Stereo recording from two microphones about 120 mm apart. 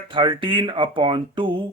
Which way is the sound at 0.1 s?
45° right (ahead or behind).